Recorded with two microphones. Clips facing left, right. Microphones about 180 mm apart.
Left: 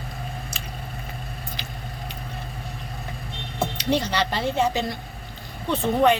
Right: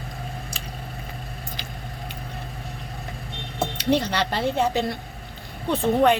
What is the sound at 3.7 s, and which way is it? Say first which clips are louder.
Speech: right 2 dB; 60° right (ahead or behind).